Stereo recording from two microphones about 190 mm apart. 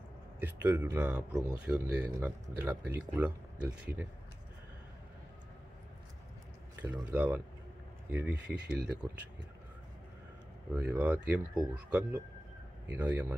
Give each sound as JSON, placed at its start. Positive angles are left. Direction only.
{"t": 0.4, "sound": "speech", "side_deg": -10}
{"t": 6.9, "sound": "speech", "side_deg": -10}
{"t": 10.7, "sound": "speech", "side_deg": -10}